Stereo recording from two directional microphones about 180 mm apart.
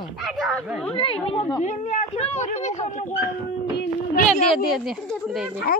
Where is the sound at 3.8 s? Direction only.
50° left (ahead or behind).